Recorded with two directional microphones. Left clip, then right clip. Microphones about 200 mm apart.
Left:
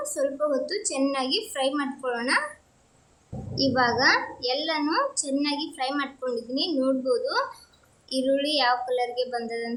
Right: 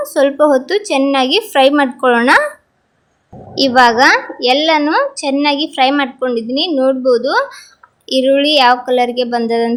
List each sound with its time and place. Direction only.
0.0 s a woman's voice: 35° right (ahead or behind)
3.5 s a woman's voice: 35° right (ahead or behind)